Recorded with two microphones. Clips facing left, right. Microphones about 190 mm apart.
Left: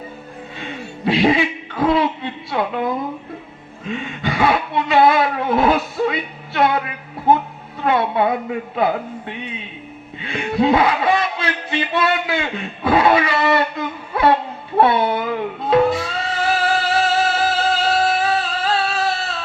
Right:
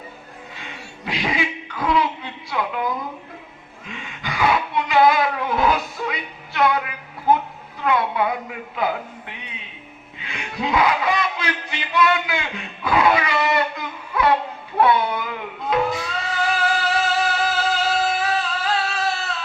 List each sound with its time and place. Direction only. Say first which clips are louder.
0.6 s a woman's voice: left 12 dB; 30° left (ahead or behind)
14.8 s music: left 3 dB; 30° left (ahead or behind)